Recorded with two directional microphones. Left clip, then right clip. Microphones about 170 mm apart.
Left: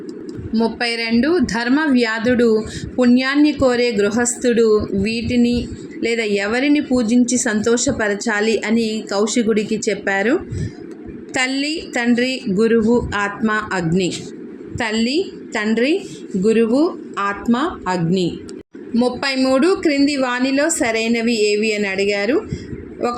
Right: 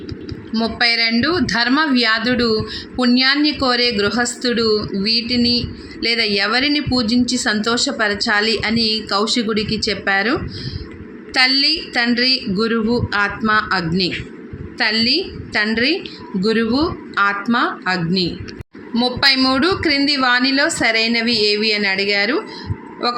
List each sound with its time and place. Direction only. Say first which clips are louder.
0.5 s speech: right 3 dB; 10° left (ahead or behind)
11.3 s a woman's voice: right 5 dB; 20° left (ahead or behind)